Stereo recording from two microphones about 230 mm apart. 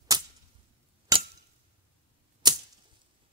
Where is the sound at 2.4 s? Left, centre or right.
Centre.